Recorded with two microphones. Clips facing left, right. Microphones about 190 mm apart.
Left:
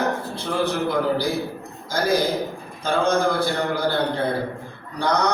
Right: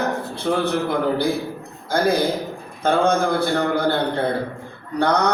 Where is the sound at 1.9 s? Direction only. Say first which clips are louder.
Right 2 dB; 60° right (ahead or behind).